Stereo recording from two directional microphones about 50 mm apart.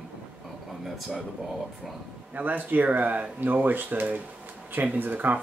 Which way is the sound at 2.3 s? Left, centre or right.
Right.